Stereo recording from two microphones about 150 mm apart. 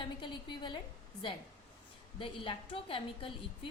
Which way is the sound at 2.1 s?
35° left (ahead or behind).